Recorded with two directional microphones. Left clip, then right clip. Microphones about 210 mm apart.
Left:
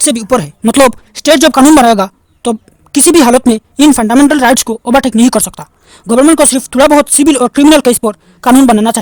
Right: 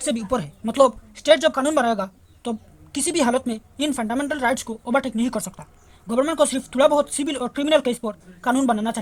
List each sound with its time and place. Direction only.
0.0 s speech: 55° left (ahead or behind)